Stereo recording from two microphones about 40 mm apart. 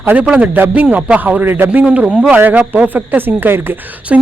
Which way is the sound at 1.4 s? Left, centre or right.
Right.